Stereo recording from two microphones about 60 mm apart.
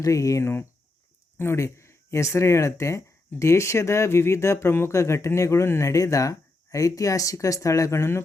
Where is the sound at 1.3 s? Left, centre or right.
Left.